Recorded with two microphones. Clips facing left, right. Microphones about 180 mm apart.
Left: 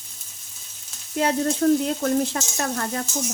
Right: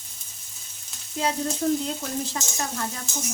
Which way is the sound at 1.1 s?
60° left (ahead or behind).